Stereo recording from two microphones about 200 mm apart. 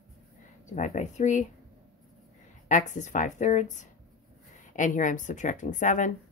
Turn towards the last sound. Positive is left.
turn(degrees=40)  # may be behind; listen again after turning